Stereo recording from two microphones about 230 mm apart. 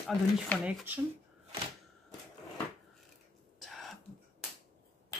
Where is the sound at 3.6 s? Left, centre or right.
Centre.